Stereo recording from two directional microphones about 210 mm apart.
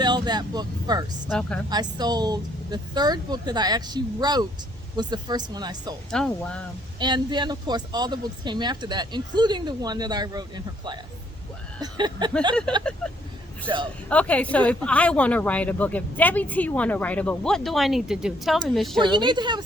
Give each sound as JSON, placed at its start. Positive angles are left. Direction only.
{"t": 0.0, "sound": "speech", "side_deg": -20}
{"t": 1.3, "sound": "speech", "side_deg": 5}
{"t": 1.7, "sound": "speech", "side_deg": -20}
{"t": 6.1, "sound": "speech", "side_deg": 5}
{"t": 7.0, "sound": "speech", "side_deg": -20}
{"t": 13.7, "sound": "speech", "side_deg": -20}
{"t": 14.1, "sound": "speech", "side_deg": 5}
{"t": 18.9, "sound": "speech", "side_deg": -20}